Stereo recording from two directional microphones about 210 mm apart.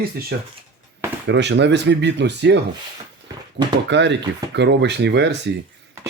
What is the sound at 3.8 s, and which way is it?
Speech, 55° right (ahead or behind).